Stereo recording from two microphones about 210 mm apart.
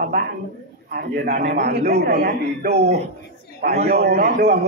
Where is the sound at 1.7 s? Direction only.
55° right (ahead or behind).